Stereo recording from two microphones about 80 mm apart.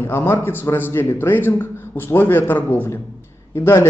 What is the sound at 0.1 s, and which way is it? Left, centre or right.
A man's voice, left.